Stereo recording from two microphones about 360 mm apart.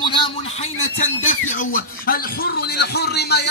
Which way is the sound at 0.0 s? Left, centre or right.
Centre.